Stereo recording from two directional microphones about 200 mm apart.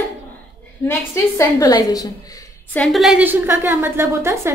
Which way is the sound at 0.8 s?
15° left (ahead or behind).